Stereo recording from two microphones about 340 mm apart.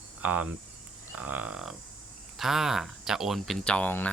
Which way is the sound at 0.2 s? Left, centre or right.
Centre.